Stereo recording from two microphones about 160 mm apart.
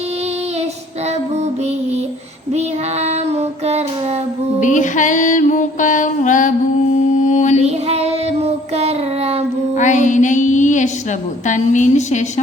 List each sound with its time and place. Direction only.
2.5 s child singing: 40° right (ahead or behind)
4.6 s music: 50° left (ahead or behind)
7.3 s mantra: 50° left (ahead or behind)
7.6 s child singing: 40° right (ahead or behind)
9.7 s music: 50° left (ahead or behind)
11.4 s a woman's voice: 50° left (ahead or behind)